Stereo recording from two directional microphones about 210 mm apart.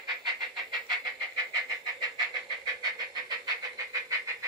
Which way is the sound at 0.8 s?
20° right (ahead or behind).